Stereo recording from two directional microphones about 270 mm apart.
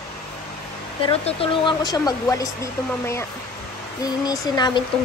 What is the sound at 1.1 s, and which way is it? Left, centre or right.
Speech, left.